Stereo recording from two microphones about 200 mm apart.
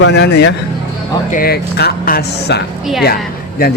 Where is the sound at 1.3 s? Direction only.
45° left (ahead or behind).